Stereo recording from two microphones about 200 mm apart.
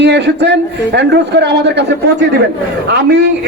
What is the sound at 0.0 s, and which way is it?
A man's voice, 60° right (ahead or behind).